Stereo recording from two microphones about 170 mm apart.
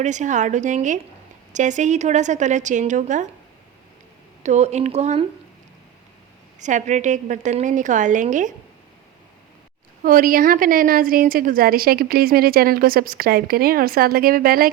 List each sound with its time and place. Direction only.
0.0 s a woman's voice: 45° right (ahead or behind)
4.4 s speech: 40° right (ahead or behind)
6.6 s a woman's voice: 45° right (ahead or behind)
10.0 s a woman's voice: 55° right (ahead or behind)